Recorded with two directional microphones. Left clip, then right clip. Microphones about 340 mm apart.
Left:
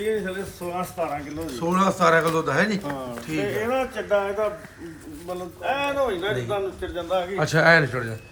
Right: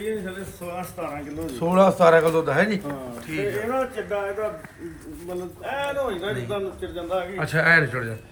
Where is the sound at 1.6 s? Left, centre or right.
Centre.